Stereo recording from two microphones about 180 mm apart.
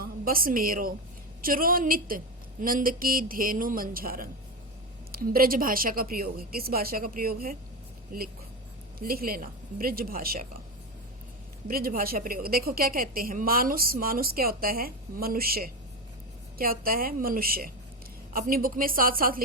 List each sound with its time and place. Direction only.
0.0 s a woman's voice: 55° right (ahead or behind)
11.7 s a woman's voice: 55° right (ahead or behind)